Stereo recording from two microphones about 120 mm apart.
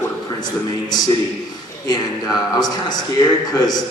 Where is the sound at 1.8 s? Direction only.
35° left (ahead or behind).